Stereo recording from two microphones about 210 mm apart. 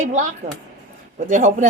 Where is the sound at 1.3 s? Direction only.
35° right (ahead or behind).